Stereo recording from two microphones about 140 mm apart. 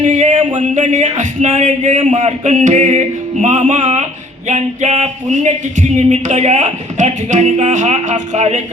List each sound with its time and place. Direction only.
0.0 s music: 60° right (ahead or behind)